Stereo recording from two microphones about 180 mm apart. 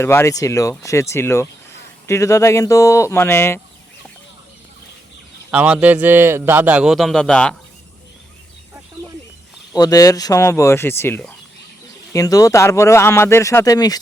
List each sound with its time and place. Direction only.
0.0 s speech: 15° left (ahead or behind)
5.5 s a man's voice: 5° right (ahead or behind)
9.7 s speech: 20° left (ahead or behind)